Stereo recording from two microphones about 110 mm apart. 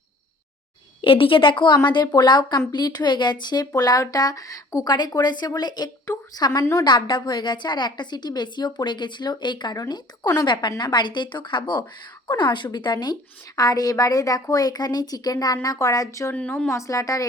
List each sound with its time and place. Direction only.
1.0 s a woman's voice: 55° left (ahead or behind); by 6.8 s 25° left (ahead or behind)
6.8 s a woman's voice: 45° left (ahead or behind)
16.3 s a woman's voice: 15° left (ahead or behind)
16.7 s a woman's voice: 30° left (ahead or behind)